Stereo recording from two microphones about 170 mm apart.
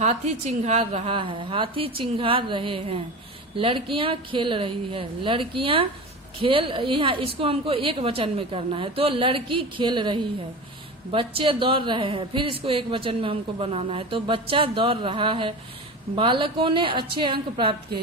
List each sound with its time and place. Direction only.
0.0 s a woman's voice: 40° right (ahead or behind)